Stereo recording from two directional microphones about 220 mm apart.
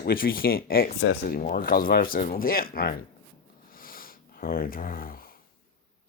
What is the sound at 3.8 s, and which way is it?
Sniff, 40° left (ahead or behind).